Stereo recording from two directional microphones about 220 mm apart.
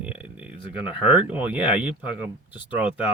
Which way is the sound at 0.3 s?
5° right (ahead or behind).